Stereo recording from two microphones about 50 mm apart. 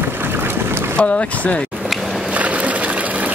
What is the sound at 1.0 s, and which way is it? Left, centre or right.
Speech, left.